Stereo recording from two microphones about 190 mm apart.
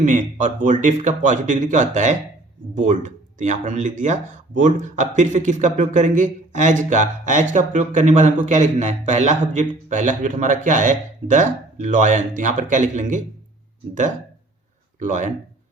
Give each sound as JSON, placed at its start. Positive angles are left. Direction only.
{"t": 0.0, "sound": "speech", "side_deg": -40}
{"t": 14.9, "sound": "speech", "side_deg": -40}